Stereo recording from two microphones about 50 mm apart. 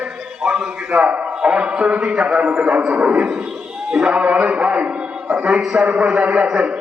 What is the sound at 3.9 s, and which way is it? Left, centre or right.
Speech, centre.